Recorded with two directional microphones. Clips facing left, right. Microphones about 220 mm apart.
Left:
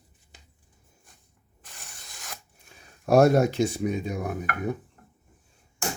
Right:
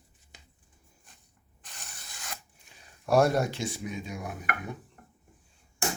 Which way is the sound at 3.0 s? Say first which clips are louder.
Left 5 dB; 45° left (ahead or behind).